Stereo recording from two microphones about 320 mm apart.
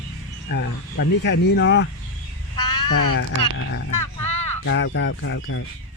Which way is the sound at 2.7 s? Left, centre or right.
Left.